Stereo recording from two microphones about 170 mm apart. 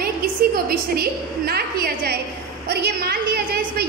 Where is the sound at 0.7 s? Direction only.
65° right (ahead or behind).